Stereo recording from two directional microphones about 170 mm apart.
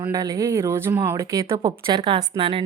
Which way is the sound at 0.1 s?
20° right (ahead or behind).